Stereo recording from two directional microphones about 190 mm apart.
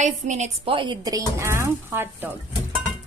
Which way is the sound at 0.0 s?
40° right (ahead or behind).